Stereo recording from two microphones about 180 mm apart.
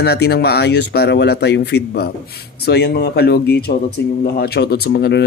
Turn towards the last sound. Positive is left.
turn(degrees=65)  # may be behind; listen again after turning